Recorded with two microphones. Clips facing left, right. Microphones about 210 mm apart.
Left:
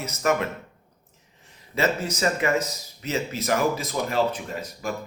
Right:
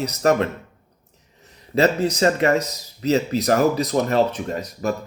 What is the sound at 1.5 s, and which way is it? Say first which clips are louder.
A man's voice: right 6 dB; 35° right (ahead or behind).